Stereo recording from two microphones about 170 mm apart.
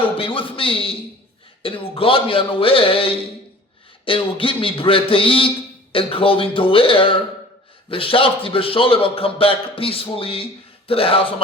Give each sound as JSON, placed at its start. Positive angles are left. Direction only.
{"t": 0.2, "sound": "a man's voice", "side_deg": 30}